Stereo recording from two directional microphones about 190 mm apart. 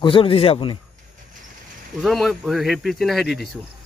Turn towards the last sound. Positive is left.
turn(degrees=0)  # may be behind; listen again after turning